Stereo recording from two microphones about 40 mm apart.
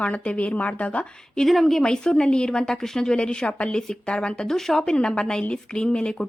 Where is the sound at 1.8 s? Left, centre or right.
Left.